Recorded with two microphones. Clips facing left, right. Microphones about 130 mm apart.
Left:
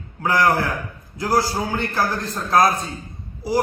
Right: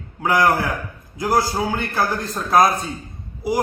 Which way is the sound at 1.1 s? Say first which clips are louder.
Right 1 dB; 20° right (ahead or behind).